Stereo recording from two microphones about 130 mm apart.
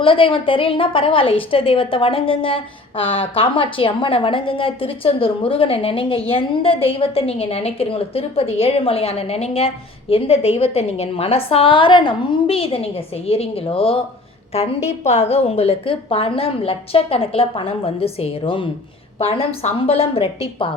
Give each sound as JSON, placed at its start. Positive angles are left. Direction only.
{"t": 0.0, "sound": "a woman's voice", "side_deg": 45}